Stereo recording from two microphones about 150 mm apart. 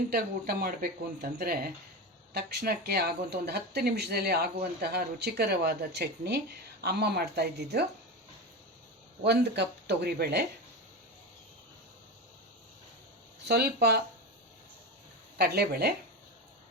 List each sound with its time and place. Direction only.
0.1 s speech: 85° right
9.2 s speech: 90° right
13.4 s speech: 90° right
15.4 s speech: 90° right